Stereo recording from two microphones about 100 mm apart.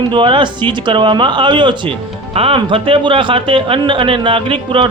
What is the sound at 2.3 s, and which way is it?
A man's voice, 65° right (ahead or behind).